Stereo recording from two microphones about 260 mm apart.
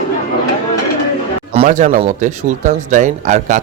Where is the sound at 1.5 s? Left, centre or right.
Right.